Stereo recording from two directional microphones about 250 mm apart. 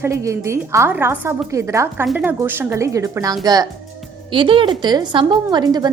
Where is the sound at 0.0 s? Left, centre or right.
Centre.